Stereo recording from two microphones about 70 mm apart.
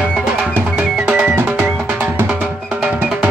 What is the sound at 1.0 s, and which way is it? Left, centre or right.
Music, right.